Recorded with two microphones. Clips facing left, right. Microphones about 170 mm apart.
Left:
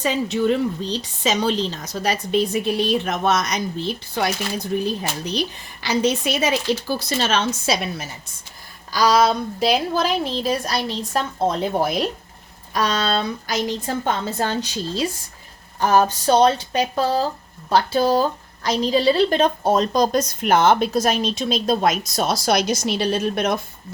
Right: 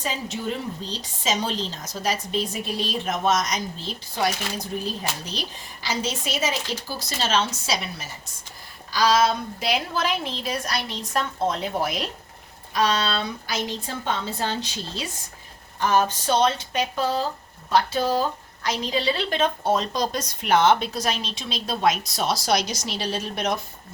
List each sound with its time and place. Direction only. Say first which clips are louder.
0.0 s a woman's voice: left 9 dB; 70° left (ahead or behind)
5.8 s a woman's voice: left 8 dB; 65° left (ahead or behind)
8.9 s a woman's voice: left 3 dB; 40° left (ahead or behind)
12.7 s a woman's voice: left 2 dB; 45° left (ahead or behind)